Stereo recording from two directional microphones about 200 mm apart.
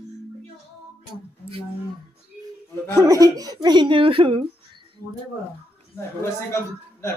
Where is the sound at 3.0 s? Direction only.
15° right (ahead or behind).